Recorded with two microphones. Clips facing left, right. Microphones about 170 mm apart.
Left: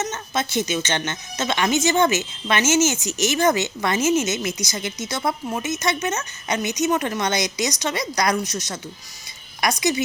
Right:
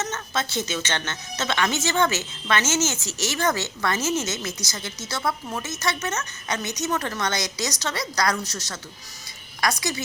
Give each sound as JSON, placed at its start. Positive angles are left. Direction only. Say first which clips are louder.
{"t": 0.0, "sound": "a woman's voice", "louder": "left 3 dB", "side_deg": 15}